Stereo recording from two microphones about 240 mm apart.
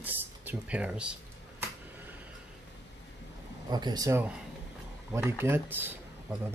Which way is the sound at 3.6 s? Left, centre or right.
Centre.